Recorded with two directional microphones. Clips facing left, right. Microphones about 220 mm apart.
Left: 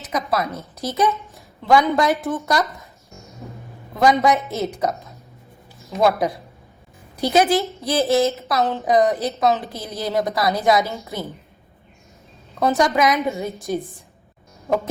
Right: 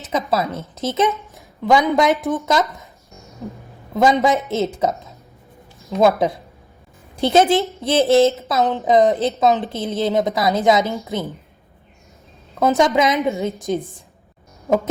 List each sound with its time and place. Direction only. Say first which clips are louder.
0.1 s a woman's voice: right 2 dB; 25° right (ahead or behind)
3.9 s a woman's voice: right 1 dB; 25° right (ahead or behind)
12.6 s a woman's voice: right 2 dB; 20° right (ahead or behind)
13.5 s a woman's voice: right 4 dB; centre (ahead or behind)